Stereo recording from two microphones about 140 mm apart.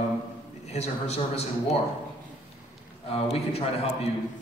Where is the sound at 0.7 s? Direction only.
50° left (ahead or behind).